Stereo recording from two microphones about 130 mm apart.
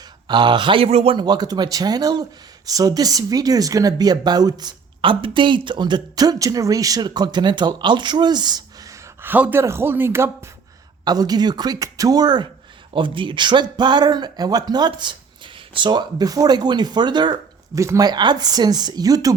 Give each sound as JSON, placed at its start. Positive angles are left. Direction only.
{"t": 0.3, "sound": "speech", "side_deg": -35}
{"t": 1.2, "sound": "speech", "side_deg": -30}
{"t": 9.2, "sound": "speech", "side_deg": -15}
{"t": 11.0, "sound": "speech", "side_deg": -30}
{"t": 17.7, "sound": "speech", "side_deg": -25}